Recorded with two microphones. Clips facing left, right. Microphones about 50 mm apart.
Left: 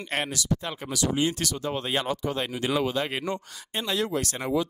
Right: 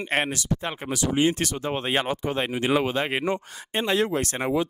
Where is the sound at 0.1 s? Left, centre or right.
Right.